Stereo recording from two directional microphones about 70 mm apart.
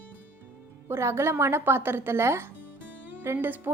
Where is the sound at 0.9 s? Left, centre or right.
Right.